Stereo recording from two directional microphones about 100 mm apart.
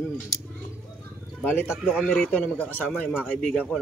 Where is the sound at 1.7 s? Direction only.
5° right (ahead or behind).